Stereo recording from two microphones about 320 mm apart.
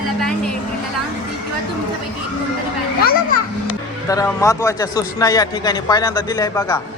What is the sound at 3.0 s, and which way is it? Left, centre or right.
Children playing, left.